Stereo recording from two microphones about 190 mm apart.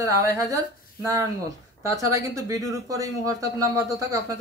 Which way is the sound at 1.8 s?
15° right (ahead or behind).